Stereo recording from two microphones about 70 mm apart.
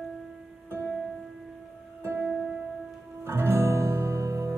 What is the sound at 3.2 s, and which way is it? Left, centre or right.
Music, right.